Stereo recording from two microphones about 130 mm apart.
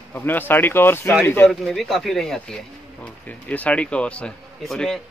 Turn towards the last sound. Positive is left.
turn(degrees=5)  # may be behind; listen again after turning